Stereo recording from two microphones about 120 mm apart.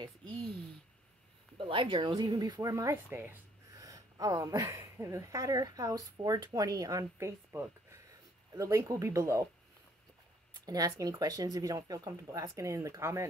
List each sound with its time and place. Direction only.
1.6 s speech: 45° right (ahead or behind); by 9.5 s 25° right (ahead or behind)
10.6 s speech: 30° right (ahead or behind)